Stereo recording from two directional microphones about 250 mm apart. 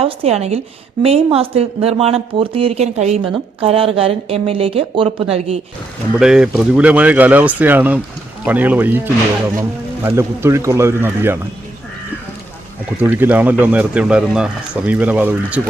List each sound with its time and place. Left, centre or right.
0.0 s speech: right
6.1 s speech: centre
13.1 s speech: centre